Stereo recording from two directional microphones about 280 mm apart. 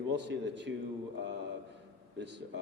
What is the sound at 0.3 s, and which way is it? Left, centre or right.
Speech, right.